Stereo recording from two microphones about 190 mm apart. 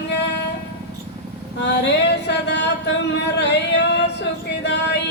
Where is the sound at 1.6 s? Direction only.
60° left (ahead or behind).